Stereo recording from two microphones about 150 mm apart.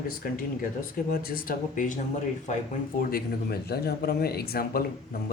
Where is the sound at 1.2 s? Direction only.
75° left (ahead or behind).